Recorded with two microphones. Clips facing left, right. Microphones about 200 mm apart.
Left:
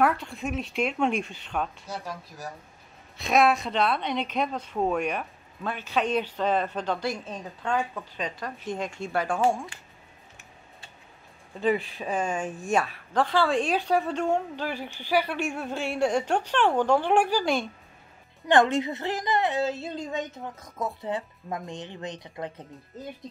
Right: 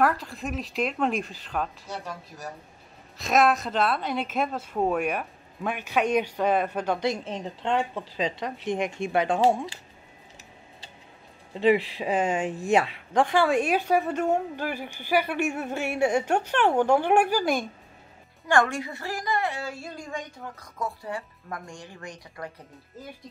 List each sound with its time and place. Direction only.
0.0 s a woman's voice: centre (ahead or behind); by 9.7 s 20° right (ahead or behind)
11.5 s a woman's voice: 25° right (ahead or behind)
18.5 s a woman's voice: 20° left (ahead or behind)